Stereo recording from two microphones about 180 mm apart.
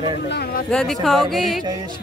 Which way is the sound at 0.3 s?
60° left (ahead or behind).